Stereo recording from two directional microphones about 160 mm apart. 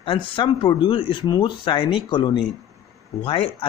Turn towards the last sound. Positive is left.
turn(degrees=35)  # may be behind; listen again after turning